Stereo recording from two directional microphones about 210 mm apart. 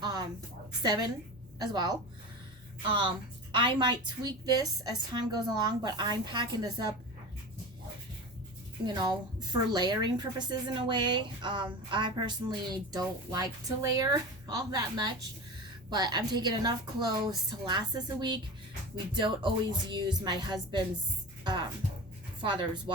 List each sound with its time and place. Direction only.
0.0 s a sound: 20° right (ahead or behind)
0.8 s a woman's voice: 20° right (ahead or behind)
8.9 s a woman's voice: 20° right (ahead or behind)